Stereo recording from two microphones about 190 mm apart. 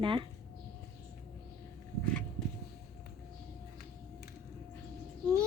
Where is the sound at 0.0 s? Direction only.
25° right (ahead or behind).